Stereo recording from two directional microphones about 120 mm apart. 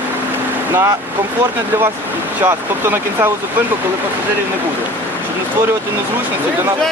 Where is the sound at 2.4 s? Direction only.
20° right (ahead or behind).